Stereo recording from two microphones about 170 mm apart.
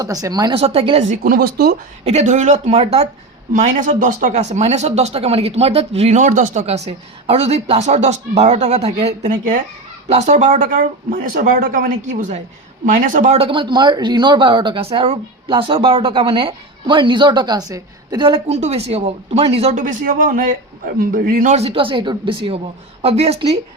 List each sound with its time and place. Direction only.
0.0 s speech: 20° right (ahead or behind)
0.6 s speech: 35° right (ahead or behind)
1.2 s speech: 60° right (ahead or behind)
2.0 s speech: 45° right (ahead or behind)
3.5 s speech: 50° right (ahead or behind)